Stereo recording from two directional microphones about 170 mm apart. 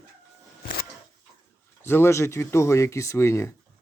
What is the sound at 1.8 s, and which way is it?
Speech, 15° left (ahead or behind).